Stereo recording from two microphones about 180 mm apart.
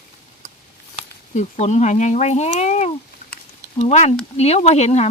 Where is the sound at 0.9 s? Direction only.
40° left (ahead or behind).